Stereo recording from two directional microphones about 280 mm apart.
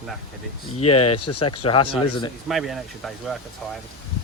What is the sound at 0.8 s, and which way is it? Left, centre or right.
Speech, left.